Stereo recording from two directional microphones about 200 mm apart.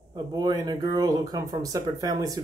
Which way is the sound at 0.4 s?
20° right (ahead or behind).